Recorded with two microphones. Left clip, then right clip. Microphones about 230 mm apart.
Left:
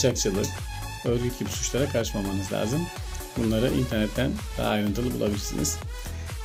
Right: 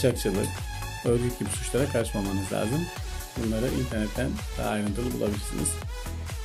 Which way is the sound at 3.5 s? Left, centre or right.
Left.